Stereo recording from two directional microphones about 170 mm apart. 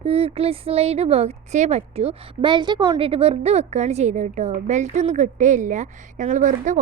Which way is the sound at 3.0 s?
35° right (ahead or behind).